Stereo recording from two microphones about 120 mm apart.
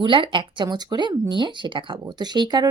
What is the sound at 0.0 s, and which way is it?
Speech, 45° right (ahead or behind).